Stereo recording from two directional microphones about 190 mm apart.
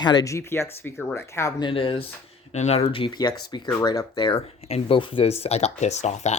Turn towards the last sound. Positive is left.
turn(degrees=35)  # may be behind; listen again after turning